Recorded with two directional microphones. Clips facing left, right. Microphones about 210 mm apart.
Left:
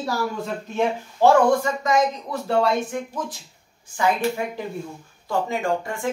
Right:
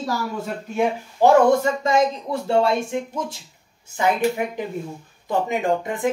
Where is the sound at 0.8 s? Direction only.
20° right (ahead or behind).